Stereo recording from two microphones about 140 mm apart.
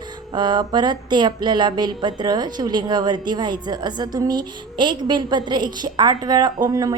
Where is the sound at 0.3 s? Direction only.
30° right (ahead or behind).